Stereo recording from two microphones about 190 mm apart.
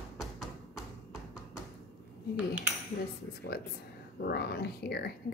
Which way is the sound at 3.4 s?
55° left (ahead or behind).